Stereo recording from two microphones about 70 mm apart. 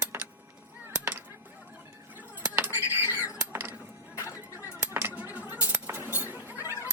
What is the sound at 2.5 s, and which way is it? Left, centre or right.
Squawk, right.